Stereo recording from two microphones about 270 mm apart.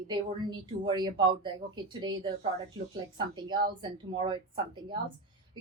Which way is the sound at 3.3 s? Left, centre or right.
Centre.